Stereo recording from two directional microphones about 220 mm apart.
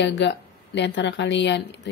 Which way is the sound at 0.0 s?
50° left (ahead or behind).